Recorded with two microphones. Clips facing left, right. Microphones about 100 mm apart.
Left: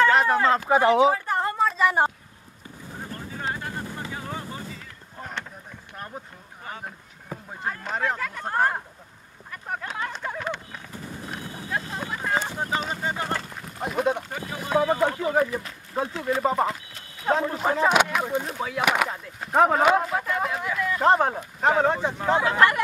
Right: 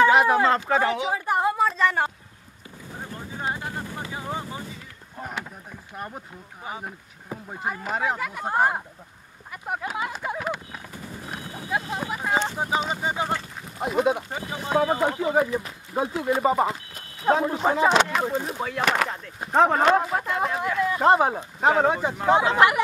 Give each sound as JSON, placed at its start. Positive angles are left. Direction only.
{"t": 0.0, "sound": "speech", "side_deg": -10}
{"t": 0.7, "sound": "speech", "side_deg": 15}
{"t": 1.1, "sound": "a sound", "side_deg": -15}
{"t": 5.2, "sound": "speech", "side_deg": -5}
{"t": 9.5, "sound": "a sound", "side_deg": -15}
{"t": 11.7, "sound": "speech", "side_deg": -15}
{"t": 14.3, "sound": "speech", "side_deg": -15}
{"t": 17.8, "sound": "speech", "side_deg": 5}
{"t": 20.6, "sound": "speech", "side_deg": -20}
{"t": 21.0, "sound": "speech", "side_deg": -5}
{"t": 22.3, "sound": "speech", "side_deg": -20}